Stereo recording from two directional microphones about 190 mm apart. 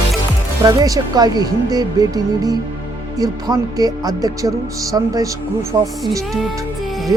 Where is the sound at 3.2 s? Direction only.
20° right (ahead or behind).